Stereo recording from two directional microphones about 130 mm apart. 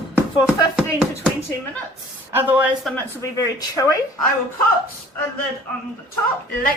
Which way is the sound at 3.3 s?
25° left (ahead or behind).